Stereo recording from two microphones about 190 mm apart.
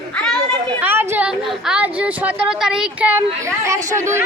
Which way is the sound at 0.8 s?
10° right (ahead or behind).